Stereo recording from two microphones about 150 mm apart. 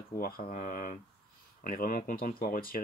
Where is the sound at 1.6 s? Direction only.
70° left (ahead or behind).